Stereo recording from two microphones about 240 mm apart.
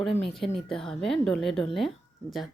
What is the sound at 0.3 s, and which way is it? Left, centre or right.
A woman's voice, centre.